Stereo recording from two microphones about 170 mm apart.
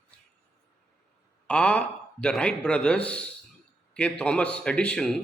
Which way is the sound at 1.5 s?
5° left (ahead or behind).